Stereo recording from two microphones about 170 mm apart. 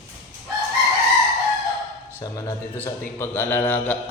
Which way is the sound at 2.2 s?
20° left (ahead or behind).